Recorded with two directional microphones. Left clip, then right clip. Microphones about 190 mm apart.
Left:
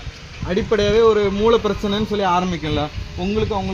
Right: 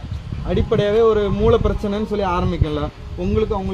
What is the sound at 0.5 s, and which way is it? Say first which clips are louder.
A man's voice: left 1 dB; 30° left (ahead or behind).